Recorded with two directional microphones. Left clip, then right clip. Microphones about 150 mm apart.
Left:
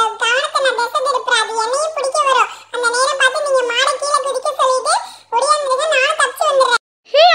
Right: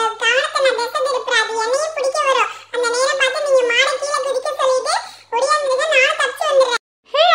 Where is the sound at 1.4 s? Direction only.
15° left (ahead or behind).